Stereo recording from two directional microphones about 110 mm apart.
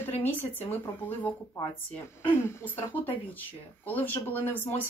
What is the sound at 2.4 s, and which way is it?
Speech, 20° left (ahead or behind).